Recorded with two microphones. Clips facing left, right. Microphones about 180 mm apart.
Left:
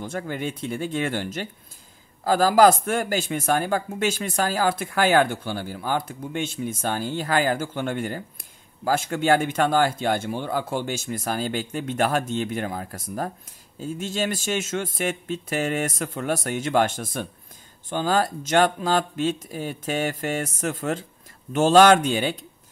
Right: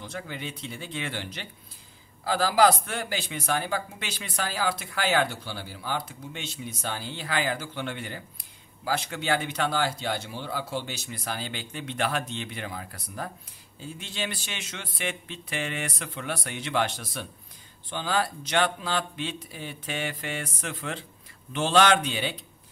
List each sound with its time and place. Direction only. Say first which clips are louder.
0.0 s a man's voice: left 7 dB; 50° left (ahead or behind)